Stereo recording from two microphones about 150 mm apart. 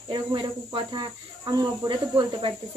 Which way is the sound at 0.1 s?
30° right (ahead or behind).